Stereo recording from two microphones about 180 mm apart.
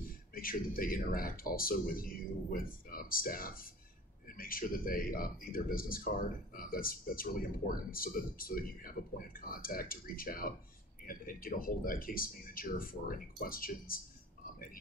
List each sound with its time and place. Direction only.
0.3 s speech: 50° left (ahead or behind)